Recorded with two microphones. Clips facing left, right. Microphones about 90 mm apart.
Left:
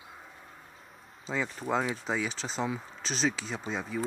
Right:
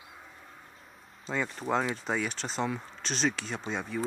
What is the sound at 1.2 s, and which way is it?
Speech, centre (ahead or behind).